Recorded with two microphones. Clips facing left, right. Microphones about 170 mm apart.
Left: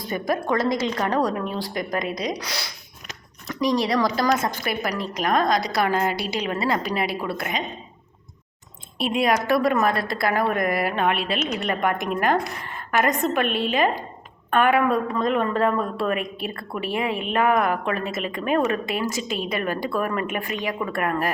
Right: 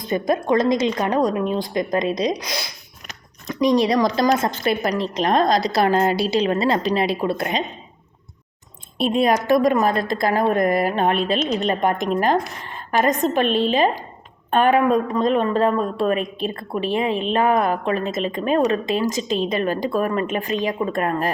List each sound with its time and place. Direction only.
0.0 s a woman's voice: 20° right (ahead or behind)
9.2 s a woman's voice: 20° right (ahead or behind)
10.8 s music: 35° right (ahead or behind)
11.5 s a woman's voice: 30° right (ahead or behind)